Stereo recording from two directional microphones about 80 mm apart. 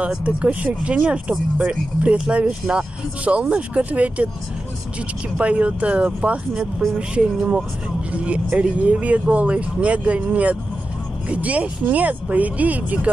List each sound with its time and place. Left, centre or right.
0.2 s speech: centre
5.4 s speech: centre